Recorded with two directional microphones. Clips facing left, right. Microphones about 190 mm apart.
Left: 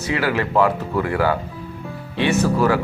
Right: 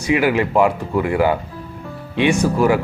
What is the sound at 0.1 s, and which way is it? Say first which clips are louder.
Speech: right 4 dB; 15° right (ahead or behind).